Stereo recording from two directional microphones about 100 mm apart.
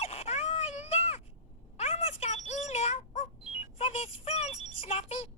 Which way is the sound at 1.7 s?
90° left.